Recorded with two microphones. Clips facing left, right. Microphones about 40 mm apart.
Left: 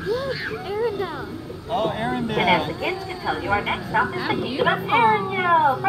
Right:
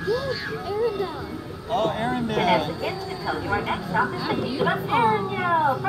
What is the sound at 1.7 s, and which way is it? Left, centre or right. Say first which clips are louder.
Speech: even; centre.